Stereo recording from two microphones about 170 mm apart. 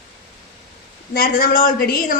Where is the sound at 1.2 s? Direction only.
55° left (ahead or behind).